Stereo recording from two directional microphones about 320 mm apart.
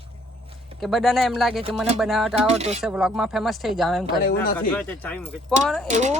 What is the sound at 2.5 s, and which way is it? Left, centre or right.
Speech, centre.